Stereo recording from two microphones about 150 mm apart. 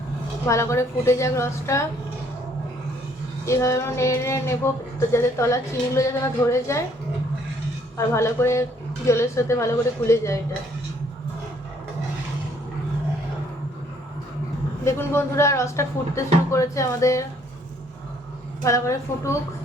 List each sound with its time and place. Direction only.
0.4 s speech: 20° left (ahead or behind)
3.4 s speech: 20° left (ahead or behind)
7.9 s speech: 20° left (ahead or behind)
14.8 s speech: 15° left (ahead or behind)
18.6 s speech: 20° left (ahead or behind)